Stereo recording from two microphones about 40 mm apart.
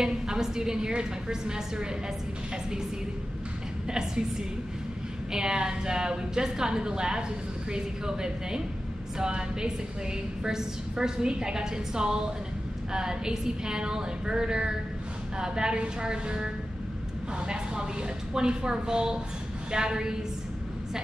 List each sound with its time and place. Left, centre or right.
0.0 s a woman's voice: centre
3.8 s a woman's voice: centre
5.3 s a woman's voice: centre
17.5 s a woman's voice: right